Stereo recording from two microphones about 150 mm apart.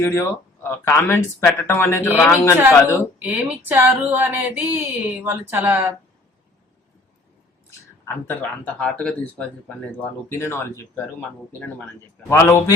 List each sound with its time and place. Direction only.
0.0 s speech: 15° left (ahead or behind)
2.6 s a sound: 15° right (ahead or behind)
8.0 s speech: 15° left (ahead or behind)
12.3 s speech: 20° left (ahead or behind)